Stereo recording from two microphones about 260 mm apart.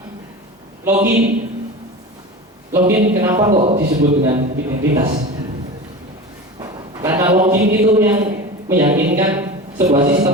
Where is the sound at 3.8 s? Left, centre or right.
Right.